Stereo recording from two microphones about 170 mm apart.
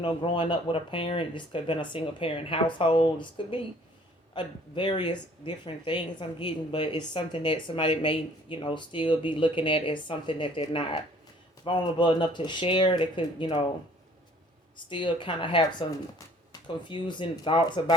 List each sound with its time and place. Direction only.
0.0 s speech: 30° left (ahead or behind)
14.8 s speech: 30° left (ahead or behind)